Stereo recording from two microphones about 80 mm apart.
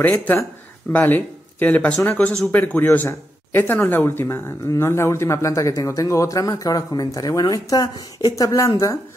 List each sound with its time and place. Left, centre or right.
0.9 s a man's voice: left